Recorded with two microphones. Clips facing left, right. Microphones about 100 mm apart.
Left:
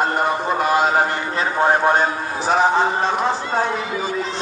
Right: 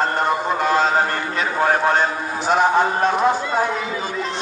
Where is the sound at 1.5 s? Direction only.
20° left (ahead or behind).